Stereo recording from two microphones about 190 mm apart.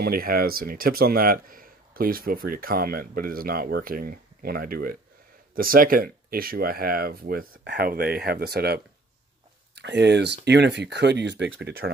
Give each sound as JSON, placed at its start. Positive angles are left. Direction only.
{"t": 0.0, "sound": "speech", "side_deg": -50}
{"t": 7.5, "sound": "speech", "side_deg": -65}